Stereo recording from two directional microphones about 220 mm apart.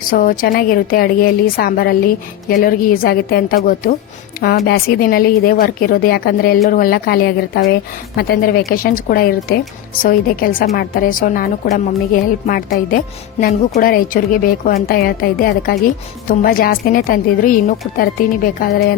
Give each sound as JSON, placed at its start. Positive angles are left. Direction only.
{"t": 0.1, "sound": "a woman's voice", "side_deg": 40}